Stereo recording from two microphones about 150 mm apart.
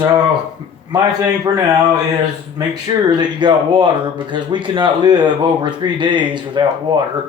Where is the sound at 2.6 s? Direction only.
25° right (ahead or behind).